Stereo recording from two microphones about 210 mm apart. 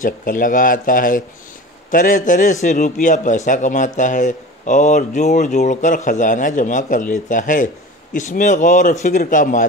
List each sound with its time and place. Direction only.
0.0 s a man's voice: 40° left (ahead or behind)